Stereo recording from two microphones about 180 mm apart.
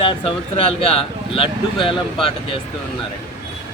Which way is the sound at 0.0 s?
30° left (ahead or behind).